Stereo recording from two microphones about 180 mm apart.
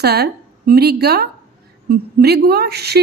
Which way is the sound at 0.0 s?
60° right (ahead or behind).